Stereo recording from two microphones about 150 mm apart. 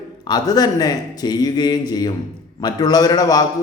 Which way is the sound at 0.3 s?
25° left (ahead or behind).